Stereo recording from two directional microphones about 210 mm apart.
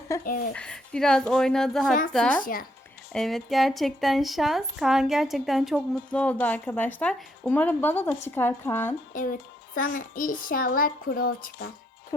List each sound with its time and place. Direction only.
0.1 s a woman's voice: 15° left (ahead or behind)
2.4 s a woman's voice: 45° left (ahead or behind)
3.1 s a woman's voice: centre (ahead or behind)
9.1 s a child's voice: 40° left (ahead or behind)